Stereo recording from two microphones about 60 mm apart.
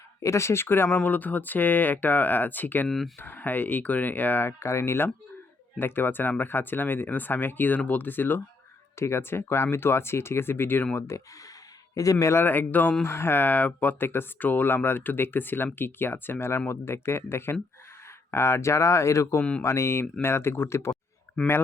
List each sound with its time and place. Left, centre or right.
0.2 s speech: left
2.8 s speech: centre
3.2 s speech: left
9.0 s speech: left
10.9 s speech: left
12.2 s speech: left
12.5 s speech: left
19.4 s speech: centre
19.6 s speech: left